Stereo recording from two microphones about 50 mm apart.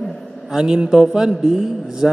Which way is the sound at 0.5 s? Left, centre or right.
Centre.